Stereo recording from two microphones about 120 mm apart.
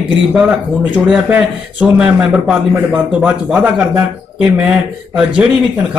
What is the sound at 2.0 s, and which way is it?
Speech, 10° right (ahead or behind).